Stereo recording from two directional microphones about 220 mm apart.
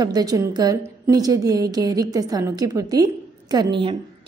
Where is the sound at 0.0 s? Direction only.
20° right (ahead or behind).